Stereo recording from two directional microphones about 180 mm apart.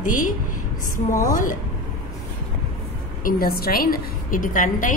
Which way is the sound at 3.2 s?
55° left (ahead or behind).